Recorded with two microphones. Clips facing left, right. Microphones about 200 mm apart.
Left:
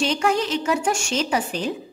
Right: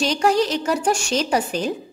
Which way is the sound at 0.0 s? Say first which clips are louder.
Right 3 dB; 40° right (ahead or behind).